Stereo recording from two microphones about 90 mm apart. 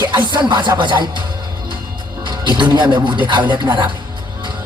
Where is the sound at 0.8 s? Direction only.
60° right (ahead or behind).